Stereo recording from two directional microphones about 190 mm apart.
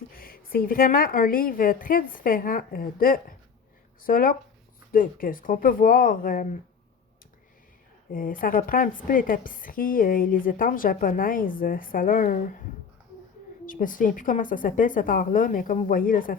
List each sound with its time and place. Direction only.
0.1 s a woman's voice: 50° left (ahead or behind)
8.1 s a woman's voice: 45° left (ahead or behind)
13.7 s a woman's voice: 45° left (ahead or behind)